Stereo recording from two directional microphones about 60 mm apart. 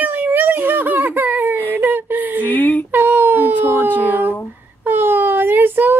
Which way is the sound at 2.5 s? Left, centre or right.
Left.